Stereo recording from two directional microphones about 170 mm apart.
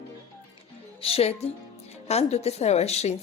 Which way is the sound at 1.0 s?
35° left (ahead or behind).